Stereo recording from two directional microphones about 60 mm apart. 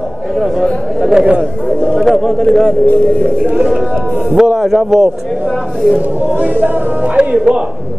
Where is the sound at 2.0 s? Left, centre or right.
Centre.